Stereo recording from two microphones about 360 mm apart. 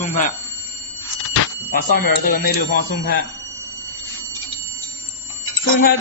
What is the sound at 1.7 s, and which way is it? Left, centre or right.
Speech, left.